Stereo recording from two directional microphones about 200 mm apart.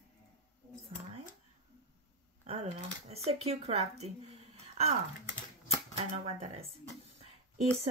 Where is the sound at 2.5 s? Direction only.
30° right (ahead or behind).